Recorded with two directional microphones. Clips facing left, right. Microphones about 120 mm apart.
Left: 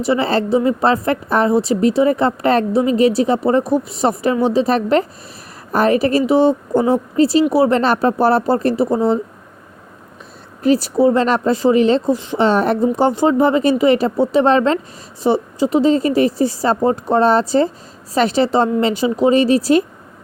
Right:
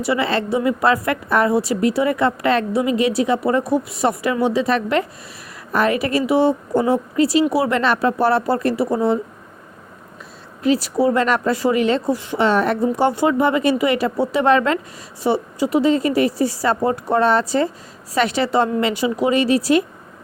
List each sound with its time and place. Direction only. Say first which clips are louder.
0.1 s a woman's voice: left 4 dB; 30° left (ahead or behind)
10.6 s a woman's voice: left 3 dB; 40° left (ahead or behind)
10.9 s a woman's voice: left 3 dB; 25° left (ahead or behind)